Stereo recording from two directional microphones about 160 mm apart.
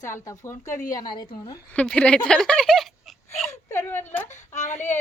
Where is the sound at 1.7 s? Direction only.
5° left (ahead or behind).